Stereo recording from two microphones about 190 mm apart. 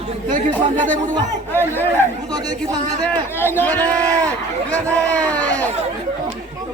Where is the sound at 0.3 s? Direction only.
45° right (ahead or behind).